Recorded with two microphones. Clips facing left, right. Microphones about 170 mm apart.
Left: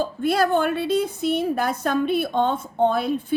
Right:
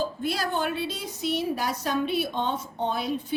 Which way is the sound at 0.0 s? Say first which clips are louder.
Left 7 dB; 55° left (ahead or behind).